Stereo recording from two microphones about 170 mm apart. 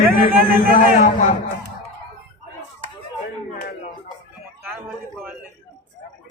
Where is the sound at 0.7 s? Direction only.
50° left (ahead or behind).